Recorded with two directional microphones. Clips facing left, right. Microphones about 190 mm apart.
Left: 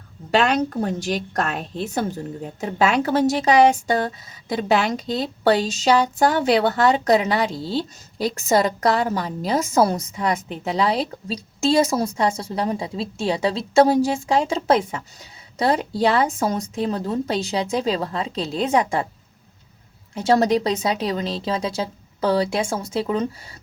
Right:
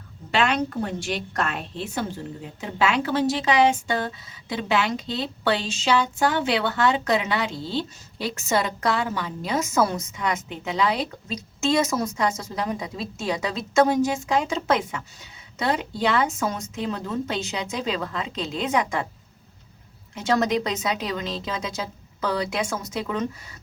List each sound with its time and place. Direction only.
0.3 s a woman's voice: 40° left (ahead or behind)
20.1 s a woman's voice: 35° left (ahead or behind)